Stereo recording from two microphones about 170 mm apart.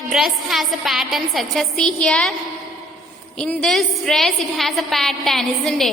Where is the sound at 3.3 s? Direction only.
5° left (ahead or behind).